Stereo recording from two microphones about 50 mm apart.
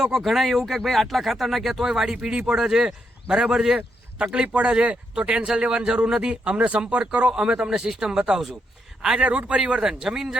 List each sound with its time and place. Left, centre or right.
0.0 s a man's voice: centre; by 9.8 s right
9.8 s a man's voice: centre